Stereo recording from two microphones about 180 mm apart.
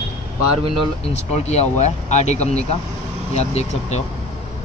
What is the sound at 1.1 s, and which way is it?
Speech, 40° left (ahead or behind).